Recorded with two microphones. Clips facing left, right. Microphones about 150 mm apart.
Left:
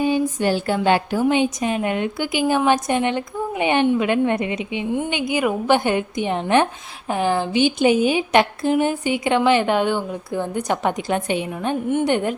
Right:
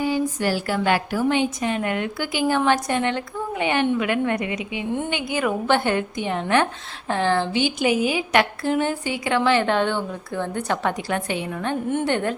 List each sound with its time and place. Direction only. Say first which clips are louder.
0.0 s a woman's voice: left 3 dB; 20° left (ahead or behind)